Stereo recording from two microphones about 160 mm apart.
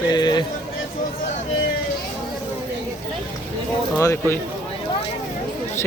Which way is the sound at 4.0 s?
15° left (ahead or behind).